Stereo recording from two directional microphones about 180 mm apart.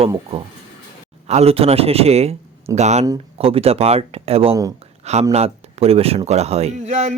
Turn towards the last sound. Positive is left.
turn(degrees=-40)  # may be behind; listen again after turning